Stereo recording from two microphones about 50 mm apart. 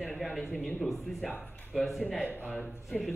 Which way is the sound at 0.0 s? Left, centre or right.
Centre.